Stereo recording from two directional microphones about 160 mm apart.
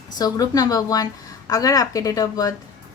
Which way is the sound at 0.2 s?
25° left (ahead or behind).